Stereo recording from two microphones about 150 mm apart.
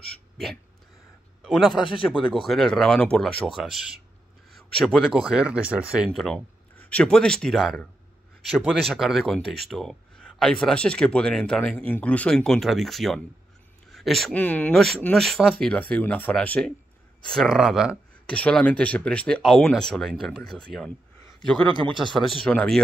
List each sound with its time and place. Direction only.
1.4 s a man's voice: 5° right (ahead or behind)
4.6 s speech: centre (ahead or behind)
6.8 s speech: 10° left (ahead or behind)
18.3 s speech: 10° left (ahead or behind)
21.6 s speech: 35° right (ahead or behind)
22.1 s speech: 10° left (ahead or behind)